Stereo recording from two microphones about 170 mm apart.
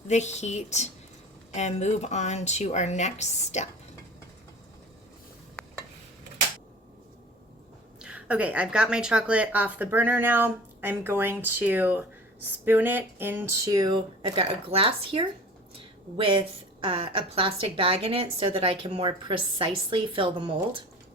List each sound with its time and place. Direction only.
0.1 s speech: 40° left (ahead or behind)
8.0 s a woman's voice: 5° right (ahead or behind); by 20.8 s 30° right (ahead or behind)